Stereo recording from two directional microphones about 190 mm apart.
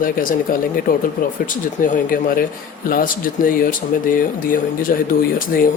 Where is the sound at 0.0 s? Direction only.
45° left (ahead or behind).